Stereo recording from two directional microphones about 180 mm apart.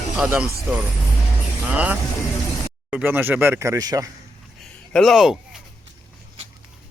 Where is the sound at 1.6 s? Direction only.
10° right (ahead or behind).